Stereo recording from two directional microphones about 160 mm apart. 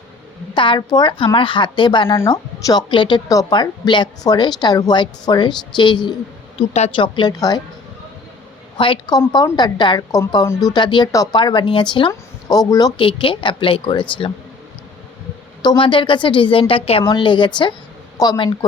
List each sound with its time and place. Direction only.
0.5 s speech: 30° left (ahead or behind)
2.1 s a woman's voice: 20° left (ahead or behind)
6.6 s a woman's voice: 40° left (ahead or behind)
8.8 s a woman's voice: 30° left (ahead or behind)
15.6 s a woman's voice: 30° left (ahead or behind)